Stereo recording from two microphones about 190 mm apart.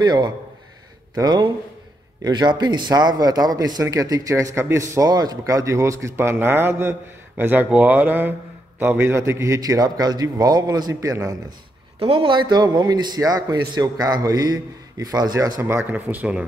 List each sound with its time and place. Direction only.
0.0 s a man's voice: 20° right (ahead or behind)
12.0 s a man's voice: 30° right (ahead or behind); by 16.4 s 10° right (ahead or behind)